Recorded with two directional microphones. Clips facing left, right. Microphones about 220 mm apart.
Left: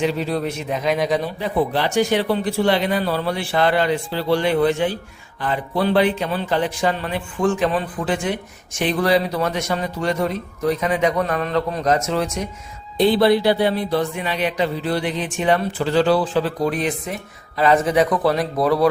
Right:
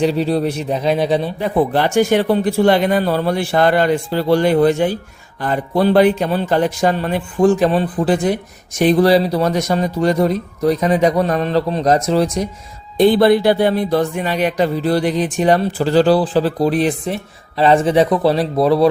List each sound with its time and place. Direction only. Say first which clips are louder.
0.0 s a man's voice: right 5 dB; 35° right (ahead or behind)
1.4 s a man's voice: right 4 dB; 50° right (ahead or behind)
13.0 s a man's voice: right 4 dB; 50° right (ahead or behind); by 18.9 s 25° right (ahead or behind)